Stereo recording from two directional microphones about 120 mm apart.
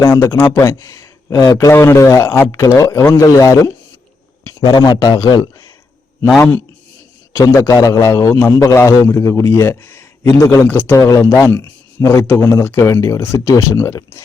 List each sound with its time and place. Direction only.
0.0 s a man's voice: 25° left (ahead or behind)
7.5 s a man's voice: 25° left (ahead or behind)